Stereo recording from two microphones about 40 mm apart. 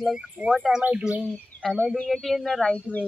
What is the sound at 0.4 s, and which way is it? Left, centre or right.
Speech, right.